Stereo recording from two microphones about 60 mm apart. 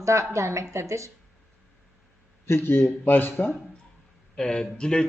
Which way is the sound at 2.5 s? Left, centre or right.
Left.